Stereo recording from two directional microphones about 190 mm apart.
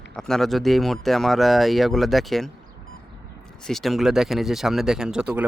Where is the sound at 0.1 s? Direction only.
5° left (ahead or behind).